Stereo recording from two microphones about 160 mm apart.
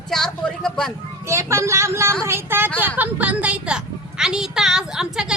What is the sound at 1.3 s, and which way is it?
Speech, 15° right (ahead or behind).